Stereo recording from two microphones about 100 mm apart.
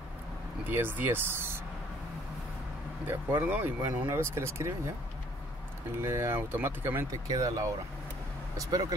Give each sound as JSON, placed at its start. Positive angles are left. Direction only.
{"t": 0.7, "sound": "speech", "side_deg": -20}
{"t": 3.1, "sound": "speech", "side_deg": -20}
{"t": 5.9, "sound": "speech", "side_deg": -25}
{"t": 7.1, "sound": "speech", "side_deg": -35}